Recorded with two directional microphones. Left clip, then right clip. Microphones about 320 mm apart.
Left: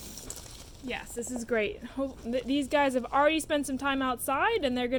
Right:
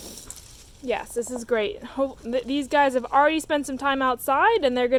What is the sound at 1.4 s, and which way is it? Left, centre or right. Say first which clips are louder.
Speech: right 3 dB; centre.